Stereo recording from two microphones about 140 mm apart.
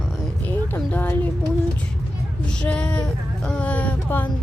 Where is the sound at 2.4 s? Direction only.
5° left (ahead or behind).